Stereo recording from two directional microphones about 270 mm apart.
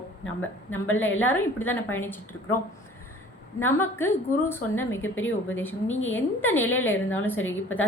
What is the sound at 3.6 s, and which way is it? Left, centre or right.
A woman's voice, centre.